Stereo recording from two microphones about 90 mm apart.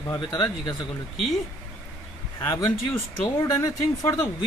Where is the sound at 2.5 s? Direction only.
40° left (ahead or behind).